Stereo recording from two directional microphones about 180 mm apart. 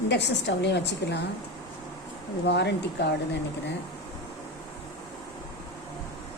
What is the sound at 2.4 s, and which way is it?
Speech, 70° left (ahead or behind).